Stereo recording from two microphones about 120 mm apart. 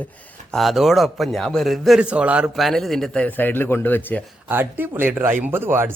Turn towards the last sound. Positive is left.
turn(degrees=-20)  # may be behind; listen again after turning